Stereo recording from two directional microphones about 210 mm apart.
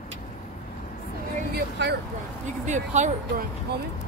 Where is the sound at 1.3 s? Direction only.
50° right (ahead or behind).